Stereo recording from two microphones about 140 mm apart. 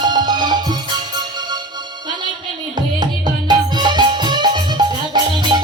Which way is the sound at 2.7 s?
30° right (ahead or behind).